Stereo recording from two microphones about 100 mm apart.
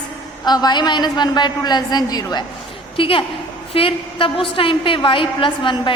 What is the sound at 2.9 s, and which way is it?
A woman's voice, 60° left (ahead or behind).